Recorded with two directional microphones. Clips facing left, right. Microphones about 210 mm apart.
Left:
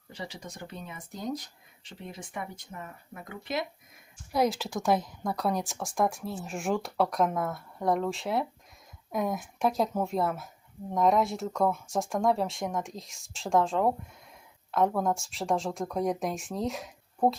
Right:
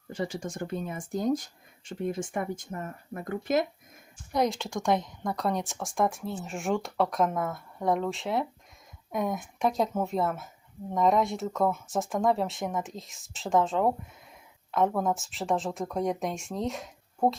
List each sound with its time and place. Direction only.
0.1 s speech: 50° right (ahead or behind)
4.3 s a woman's voice: 5° left (ahead or behind)